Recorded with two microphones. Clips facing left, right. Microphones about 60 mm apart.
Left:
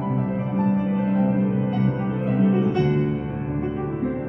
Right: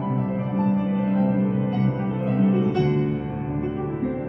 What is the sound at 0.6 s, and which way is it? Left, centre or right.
Music, left.